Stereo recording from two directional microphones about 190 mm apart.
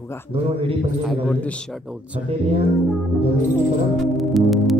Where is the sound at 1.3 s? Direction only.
5° left (ahead or behind).